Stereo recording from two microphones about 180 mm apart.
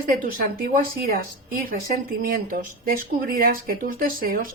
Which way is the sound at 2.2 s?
50° right (ahead or behind).